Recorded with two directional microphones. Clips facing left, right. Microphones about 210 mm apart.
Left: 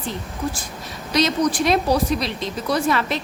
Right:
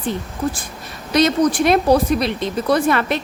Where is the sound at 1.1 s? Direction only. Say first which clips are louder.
Right 4 dB; 55° right (ahead or behind).